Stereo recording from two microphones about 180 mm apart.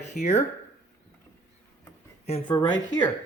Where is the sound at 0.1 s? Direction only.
55° left (ahead or behind).